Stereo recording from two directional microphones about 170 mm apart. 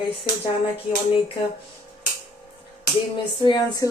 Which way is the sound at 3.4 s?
25° left (ahead or behind).